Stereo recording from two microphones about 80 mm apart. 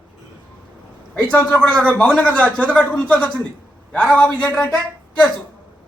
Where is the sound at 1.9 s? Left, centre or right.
Centre.